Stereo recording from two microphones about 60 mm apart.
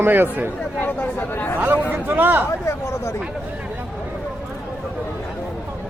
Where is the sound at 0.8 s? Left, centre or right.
Left.